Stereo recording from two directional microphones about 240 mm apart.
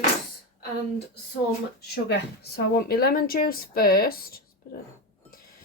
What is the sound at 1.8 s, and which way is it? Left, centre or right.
Speech, left.